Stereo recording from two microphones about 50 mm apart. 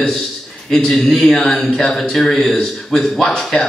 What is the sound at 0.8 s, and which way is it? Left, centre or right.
A man's voice, centre.